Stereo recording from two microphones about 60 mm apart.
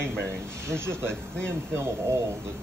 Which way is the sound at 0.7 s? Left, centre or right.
Right.